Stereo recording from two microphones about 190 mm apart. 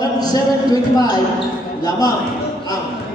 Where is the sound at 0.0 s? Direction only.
20° left (ahead or behind).